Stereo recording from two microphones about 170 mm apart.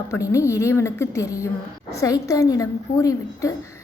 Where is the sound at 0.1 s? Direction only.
20° left (ahead or behind).